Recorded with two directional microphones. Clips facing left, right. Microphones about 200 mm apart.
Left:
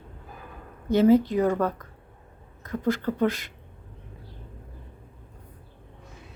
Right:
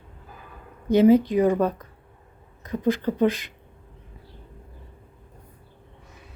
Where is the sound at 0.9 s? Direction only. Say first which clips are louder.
Right 2 dB; 15° right (ahead or behind).